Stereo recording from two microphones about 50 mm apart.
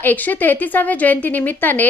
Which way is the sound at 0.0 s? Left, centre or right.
Left.